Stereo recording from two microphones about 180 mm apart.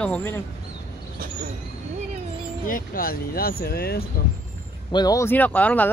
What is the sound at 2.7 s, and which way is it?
Speech, 55° left (ahead or behind).